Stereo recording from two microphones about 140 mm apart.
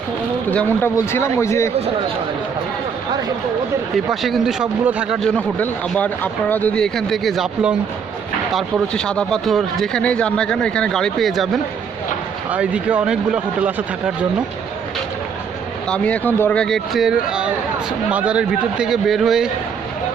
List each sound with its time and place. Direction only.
0.5 s speech: 10° left (ahead or behind)
3.9 s speech: centre (ahead or behind)
5.2 s speech: 5° left (ahead or behind)
8.5 s speech: 5° left (ahead or behind)
12.5 s speech: 10° right (ahead or behind)
15.9 s speech: 10° left (ahead or behind)